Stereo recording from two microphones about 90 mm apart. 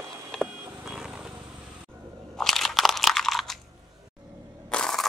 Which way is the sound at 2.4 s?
5° left (ahead or behind).